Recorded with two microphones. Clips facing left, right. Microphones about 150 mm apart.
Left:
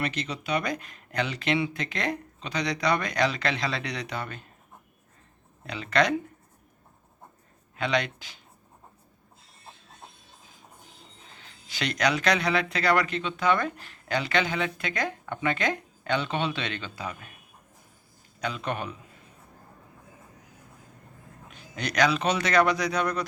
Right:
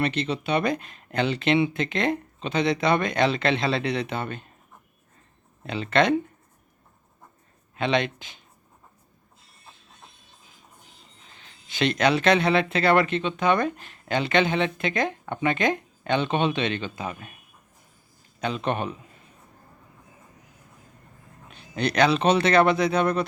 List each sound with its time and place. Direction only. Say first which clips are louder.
0.0 s speech: right 6 dB; 30° right (ahead or behind)
5.6 s speech: right 3 dB; 25° right (ahead or behind)
7.8 s speech: right 3 dB; 25° right (ahead or behind)
11.7 s speech: right 5 dB; 25° right (ahead or behind)
18.3 s speech: right 5 dB; 25° right (ahead or behind)
21.5 s speech: right 5 dB; 30° right (ahead or behind)